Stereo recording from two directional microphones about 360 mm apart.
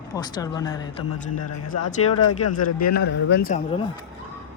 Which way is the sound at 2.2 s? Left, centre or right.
Left.